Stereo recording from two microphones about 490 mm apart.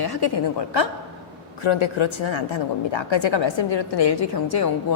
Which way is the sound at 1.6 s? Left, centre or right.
Left.